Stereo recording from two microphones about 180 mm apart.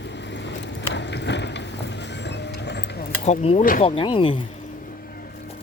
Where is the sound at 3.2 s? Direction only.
40° left (ahead or behind).